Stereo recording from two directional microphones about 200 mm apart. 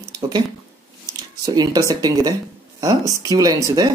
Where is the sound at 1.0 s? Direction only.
20° right (ahead or behind).